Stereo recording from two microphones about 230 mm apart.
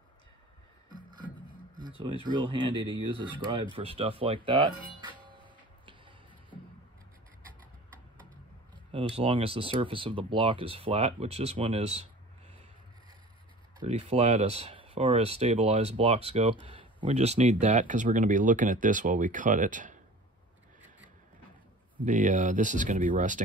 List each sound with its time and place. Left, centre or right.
2.3 s speech: centre
8.9 s speech: right
13.7 s speech: right
22.0 s speech: right